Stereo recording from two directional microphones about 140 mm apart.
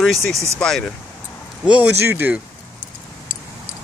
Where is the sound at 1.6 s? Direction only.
10° right (ahead or behind).